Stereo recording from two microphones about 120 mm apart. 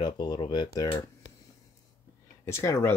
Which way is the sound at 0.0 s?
40° left (ahead or behind).